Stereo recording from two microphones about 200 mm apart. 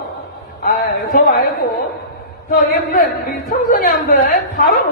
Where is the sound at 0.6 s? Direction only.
50° left (ahead or behind).